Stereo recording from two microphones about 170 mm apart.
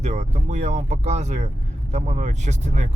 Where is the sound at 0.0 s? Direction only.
45° right (ahead or behind).